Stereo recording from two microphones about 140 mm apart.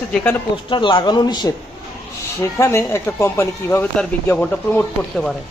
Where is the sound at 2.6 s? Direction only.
20° left (ahead or behind).